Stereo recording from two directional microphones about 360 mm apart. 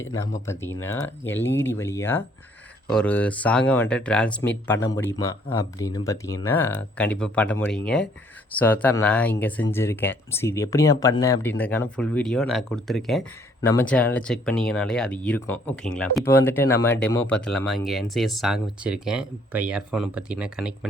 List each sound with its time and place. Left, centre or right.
0.0 s speech: centre